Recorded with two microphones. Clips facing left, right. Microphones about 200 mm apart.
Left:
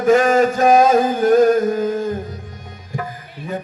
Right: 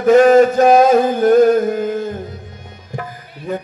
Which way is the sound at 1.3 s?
40° left (ahead or behind).